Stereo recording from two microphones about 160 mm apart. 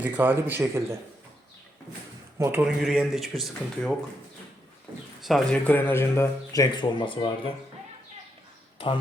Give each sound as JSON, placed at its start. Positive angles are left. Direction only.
{"t": 0.0, "sound": "speech", "side_deg": -10}
{"t": 2.4, "sound": "speech", "side_deg": -15}
{"t": 2.6, "sound": "speech", "side_deg": 0}
{"t": 5.2, "sound": "speech", "side_deg": 0}
{"t": 7.0, "sound": "speech", "side_deg": 35}